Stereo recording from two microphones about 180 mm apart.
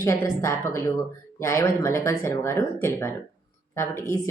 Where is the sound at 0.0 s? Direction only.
15° left (ahead or behind).